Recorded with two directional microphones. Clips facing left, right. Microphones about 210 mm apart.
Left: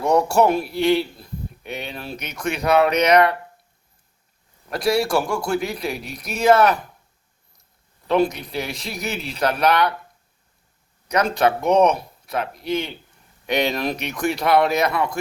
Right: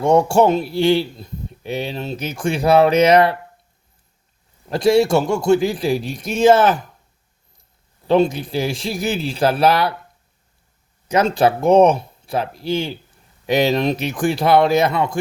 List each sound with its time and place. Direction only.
0.0 s a man's voice: 25° right (ahead or behind)
4.7 s a man's voice: 25° right (ahead or behind)
8.0 s a man's voice: 30° right (ahead or behind)
11.1 s a man's voice: 25° right (ahead or behind)